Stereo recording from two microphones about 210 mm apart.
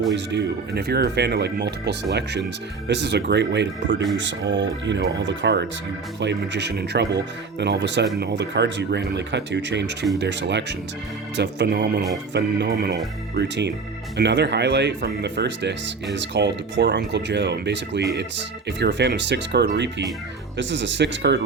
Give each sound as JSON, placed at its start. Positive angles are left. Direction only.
{"t": 0.1, "sound": "speech", "side_deg": -55}